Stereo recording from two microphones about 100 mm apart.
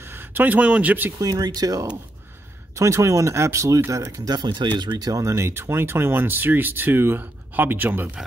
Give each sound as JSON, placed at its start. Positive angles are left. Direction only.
{"t": 0.0, "sound": "speech", "side_deg": -20}
{"t": 1.1, "sound": "speech", "side_deg": -40}
{"t": 4.2, "sound": "speech", "side_deg": -45}